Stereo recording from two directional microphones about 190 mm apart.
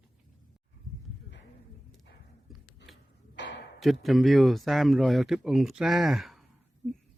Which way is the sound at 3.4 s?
65° left (ahead or behind).